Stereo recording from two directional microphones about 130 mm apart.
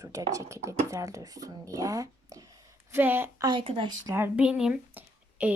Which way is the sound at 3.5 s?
40° right (ahead or behind).